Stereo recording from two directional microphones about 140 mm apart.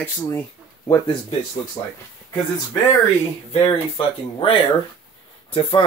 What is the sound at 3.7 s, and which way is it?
Speech, 40° left (ahead or behind).